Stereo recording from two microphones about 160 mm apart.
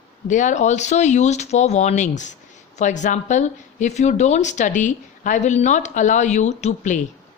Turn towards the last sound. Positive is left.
turn(degrees=50)  # may be behind; listen again after turning